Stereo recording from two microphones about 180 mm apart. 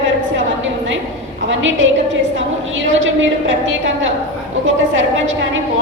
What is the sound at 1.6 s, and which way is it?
Speech, 90° right.